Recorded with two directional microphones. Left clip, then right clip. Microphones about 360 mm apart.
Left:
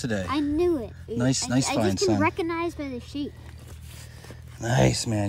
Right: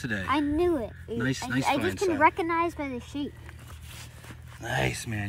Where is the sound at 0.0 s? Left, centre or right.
Centre.